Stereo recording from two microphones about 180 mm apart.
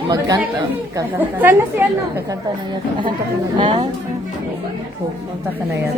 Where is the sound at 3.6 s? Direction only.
25° right (ahead or behind).